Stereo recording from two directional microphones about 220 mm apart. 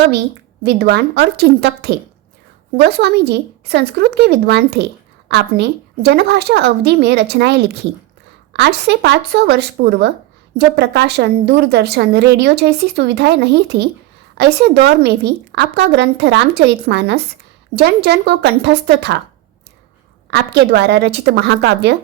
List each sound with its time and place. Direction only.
0.6 s a woman's voice: 50° right (ahead or behind)
20.3 s a woman's voice: 50° right (ahead or behind)